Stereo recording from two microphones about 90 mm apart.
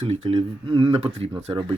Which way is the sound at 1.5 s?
60° right (ahead or behind).